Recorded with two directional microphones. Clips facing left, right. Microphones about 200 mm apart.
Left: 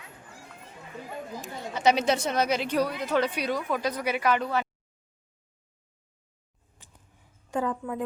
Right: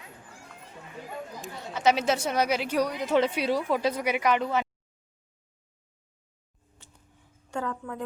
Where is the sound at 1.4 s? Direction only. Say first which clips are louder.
Left 1 dB; centre (ahead or behind); by 4.6 s 20° right (ahead or behind).